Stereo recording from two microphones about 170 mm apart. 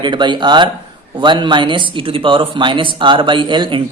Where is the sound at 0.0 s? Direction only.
25° right (ahead or behind).